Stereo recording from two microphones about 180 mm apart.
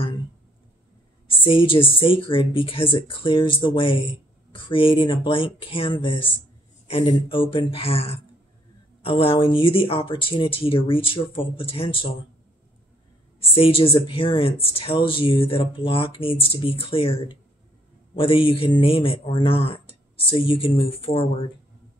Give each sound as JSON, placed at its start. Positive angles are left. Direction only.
{"t": 1.3, "sound": "speech", "side_deg": 30}
{"t": 13.4, "sound": "speech", "side_deg": 30}